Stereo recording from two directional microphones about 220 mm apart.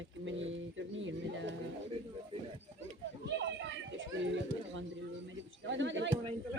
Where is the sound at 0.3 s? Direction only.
60° right (ahead or behind).